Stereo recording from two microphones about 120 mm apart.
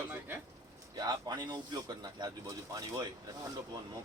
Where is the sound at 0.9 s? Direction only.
35° right (ahead or behind).